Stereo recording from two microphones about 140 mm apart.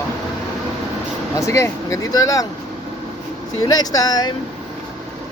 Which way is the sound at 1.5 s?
20° left (ahead or behind).